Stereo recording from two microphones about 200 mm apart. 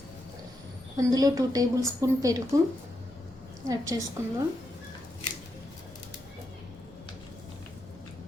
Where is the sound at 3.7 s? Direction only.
15° right (ahead or behind).